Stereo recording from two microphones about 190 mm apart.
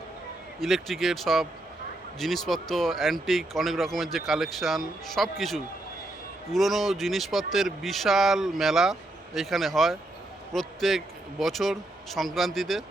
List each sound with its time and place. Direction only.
0.6 s speech: centre (ahead or behind)